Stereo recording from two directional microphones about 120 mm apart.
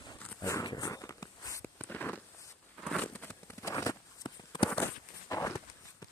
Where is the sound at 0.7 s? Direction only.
30° left (ahead or behind).